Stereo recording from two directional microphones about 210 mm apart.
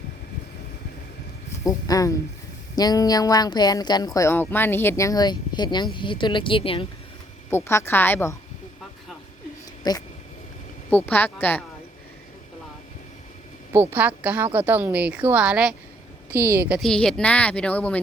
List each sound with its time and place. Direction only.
1.6 s speech: 15° left (ahead or behind)
7.5 s speech: 10° left (ahead or behind)
9.8 s speech: 20° left (ahead or behind)
10.9 s speech: 10° left (ahead or behind)
13.7 s a woman's voice: 10° right (ahead or behind); by 18.0 s 5° left (ahead or behind)